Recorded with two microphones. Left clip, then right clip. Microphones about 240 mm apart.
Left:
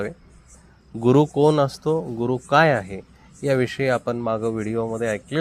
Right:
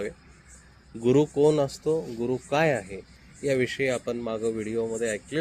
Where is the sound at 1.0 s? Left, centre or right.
Left.